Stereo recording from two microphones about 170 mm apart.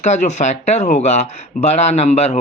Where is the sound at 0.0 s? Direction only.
45° left (ahead or behind).